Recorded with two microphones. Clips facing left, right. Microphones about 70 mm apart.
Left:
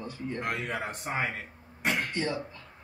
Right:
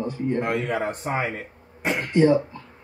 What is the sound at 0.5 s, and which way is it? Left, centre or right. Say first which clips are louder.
Speech: right 9 dB; right.